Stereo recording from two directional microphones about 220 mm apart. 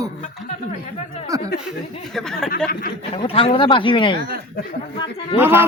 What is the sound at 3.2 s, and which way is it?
Speech, 25° left (ahead or behind).